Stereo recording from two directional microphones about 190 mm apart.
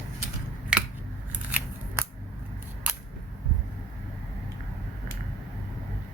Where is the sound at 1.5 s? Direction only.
10° right (ahead or behind).